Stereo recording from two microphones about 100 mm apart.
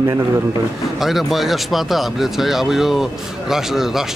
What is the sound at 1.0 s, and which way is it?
Speech, centre (ahead or behind).